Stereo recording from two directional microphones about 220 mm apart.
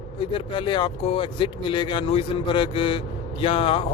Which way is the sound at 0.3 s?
20° left (ahead or behind).